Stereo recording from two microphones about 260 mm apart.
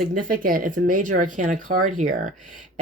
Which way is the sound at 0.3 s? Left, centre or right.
Right.